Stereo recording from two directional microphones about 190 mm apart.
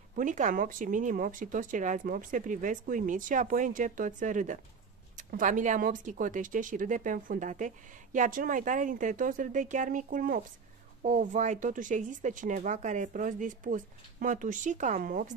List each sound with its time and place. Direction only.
0.1 s speech: 40° right (ahead or behind)